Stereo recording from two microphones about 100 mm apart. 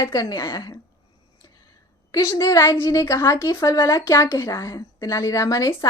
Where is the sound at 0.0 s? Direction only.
40° left (ahead or behind).